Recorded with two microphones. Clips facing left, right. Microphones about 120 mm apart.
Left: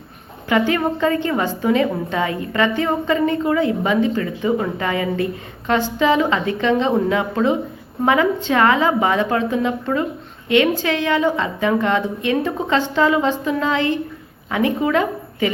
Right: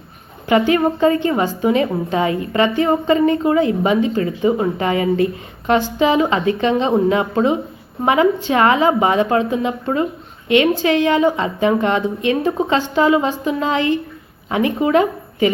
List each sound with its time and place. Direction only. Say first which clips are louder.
0.4 s a woman's voice: right 3 dB; 20° right (ahead or behind)
10.5 s a woman's voice: right 3 dB; 20° right (ahead or behind)
12.9 s a sound: right 2 dB; 15° right (ahead or behind)
14.5 s a woman's voice: right 3 dB; 20° right (ahead or behind)